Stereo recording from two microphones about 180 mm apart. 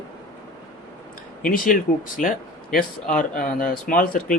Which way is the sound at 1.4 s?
50° left (ahead or behind).